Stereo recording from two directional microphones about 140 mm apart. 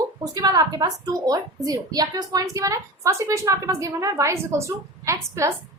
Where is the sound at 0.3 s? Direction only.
30° right (ahead or behind).